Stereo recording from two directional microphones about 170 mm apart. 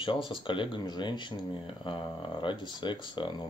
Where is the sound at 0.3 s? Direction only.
30° left (ahead or behind).